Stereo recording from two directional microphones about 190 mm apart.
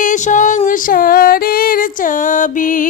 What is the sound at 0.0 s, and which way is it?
Music, 40° left (ahead or behind).